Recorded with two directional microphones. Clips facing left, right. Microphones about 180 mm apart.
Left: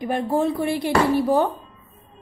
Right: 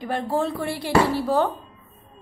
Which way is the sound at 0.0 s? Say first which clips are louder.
Left 3 dB; 15° left (ahead or behind).